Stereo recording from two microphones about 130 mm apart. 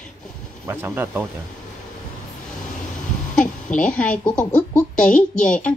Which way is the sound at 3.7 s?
75° left (ahead or behind).